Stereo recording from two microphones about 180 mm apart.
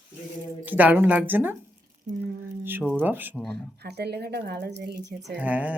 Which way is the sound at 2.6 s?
10° right (ahead or behind).